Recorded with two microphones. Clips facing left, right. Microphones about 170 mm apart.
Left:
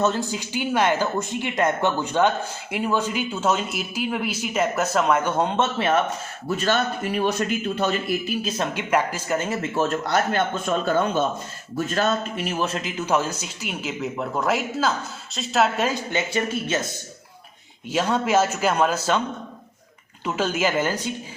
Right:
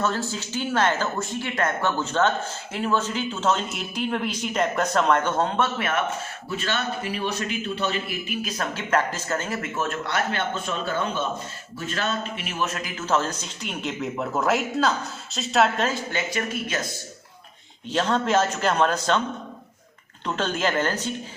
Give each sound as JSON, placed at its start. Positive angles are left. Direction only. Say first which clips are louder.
{"t": 0.0, "sound": "speech", "louder": "left 3 dB", "side_deg": 20}
{"t": 5.5, "sound": "speech", "louder": "left 4 dB", "side_deg": 30}
{"t": 6.6, "sound": "a man's voice", "louder": "left 5 dB", "side_deg": 45}
{"t": 8.4, "sound": "speech", "louder": "left 4 dB", "side_deg": 25}
{"t": 8.9, "sound": "speech", "louder": "left 1 dB", "side_deg": 15}
{"t": 9.7, "sound": "a man's voice", "louder": "left 6 dB", "side_deg": 35}
{"t": 13.0, "sound": "speech", "louder": "left 1 dB", "side_deg": 10}
{"t": 16.1, "sound": "speech", "louder": "left 3 dB", "side_deg": 25}
{"t": 17.8, "sound": "speech", "louder": "left 1 dB", "side_deg": 10}
{"t": 20.2, "sound": "speech", "louder": "left 2 dB", "side_deg": 10}